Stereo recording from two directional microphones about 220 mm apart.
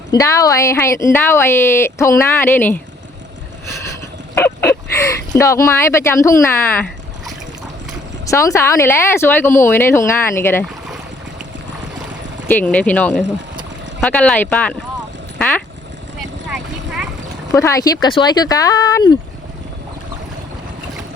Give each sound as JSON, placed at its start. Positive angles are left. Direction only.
{"t": 0.1, "sound": "speech", "side_deg": 15}
{"t": 4.4, "sound": "a sound", "side_deg": 10}
{"t": 5.4, "sound": "speech", "side_deg": 15}
{"t": 8.3, "sound": "speech", "side_deg": 15}
{"t": 12.5, "sound": "speech", "side_deg": 5}
{"t": 15.4, "sound": "a sound", "side_deg": 5}
{"t": 16.5, "sound": "vehicle", "side_deg": 0}
{"t": 17.5, "sound": "speech", "side_deg": 15}